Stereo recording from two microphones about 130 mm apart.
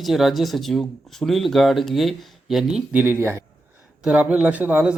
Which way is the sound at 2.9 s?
15° right (ahead or behind).